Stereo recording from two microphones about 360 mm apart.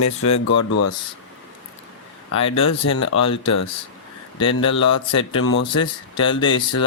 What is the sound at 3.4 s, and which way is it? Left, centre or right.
Speech, left.